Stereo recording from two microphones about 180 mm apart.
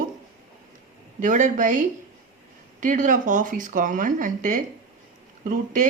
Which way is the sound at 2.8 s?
45° right (ahead or behind).